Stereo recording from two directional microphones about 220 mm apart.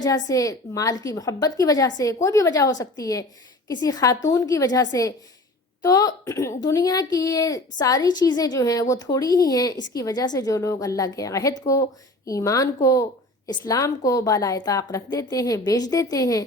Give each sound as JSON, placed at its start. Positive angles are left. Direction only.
{"t": 0.0, "sound": "a woman's voice", "side_deg": 15}